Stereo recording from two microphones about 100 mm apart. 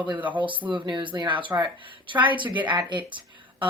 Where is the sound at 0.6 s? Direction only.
40° right (ahead or behind).